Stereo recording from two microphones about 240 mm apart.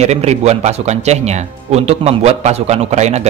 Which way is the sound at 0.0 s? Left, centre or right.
Right.